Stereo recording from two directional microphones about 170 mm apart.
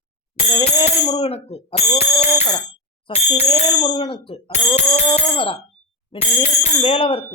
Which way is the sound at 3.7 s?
25° left (ahead or behind).